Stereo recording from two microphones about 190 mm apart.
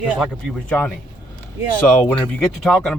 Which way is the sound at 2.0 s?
10° left (ahead or behind).